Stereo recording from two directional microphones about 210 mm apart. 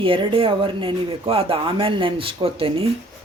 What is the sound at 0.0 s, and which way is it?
Speech, 25° right (ahead or behind).